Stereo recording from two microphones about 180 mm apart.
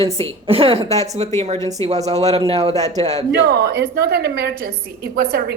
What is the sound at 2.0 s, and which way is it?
Speech, 35° right (ahead or behind).